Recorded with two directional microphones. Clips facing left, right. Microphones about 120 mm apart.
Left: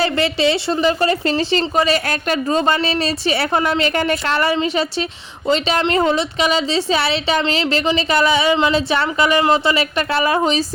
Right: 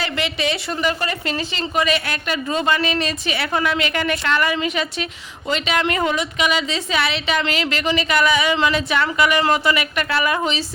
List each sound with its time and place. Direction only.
0.0 s a woman's voice: 35° left (ahead or behind)